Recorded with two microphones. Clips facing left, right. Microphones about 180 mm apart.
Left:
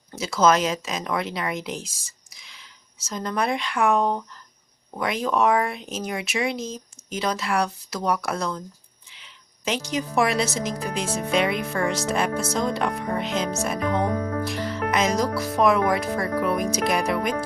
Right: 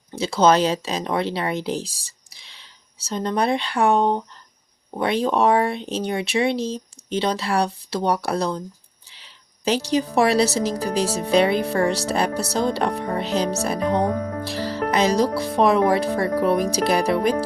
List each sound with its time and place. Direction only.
0.2 s speech: 30° right (ahead or behind)